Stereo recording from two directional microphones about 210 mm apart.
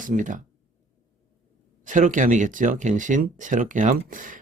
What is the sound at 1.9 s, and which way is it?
Speech, 35° right (ahead or behind).